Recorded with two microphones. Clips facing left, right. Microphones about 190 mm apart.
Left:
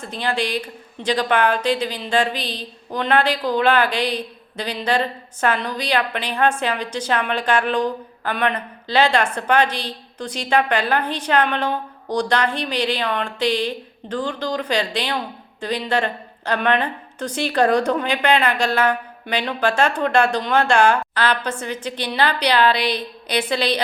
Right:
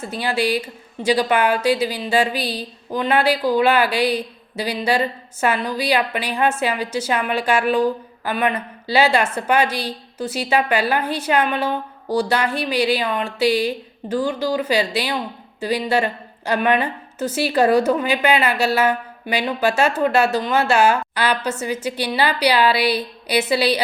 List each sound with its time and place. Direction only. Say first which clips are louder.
0.0 s a woman's voice: right 2 dB; 10° right (ahead or behind)